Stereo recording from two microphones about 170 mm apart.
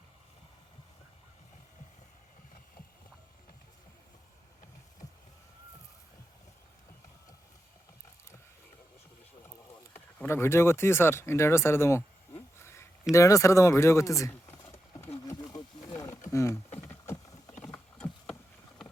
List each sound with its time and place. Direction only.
9.9 s speech: 10° left (ahead or behind)
15.3 s wild animals: 20° left (ahead or behind)
16.3 s speech: 15° left (ahead or behind)
16.7 s a sound: 10° left (ahead or behind)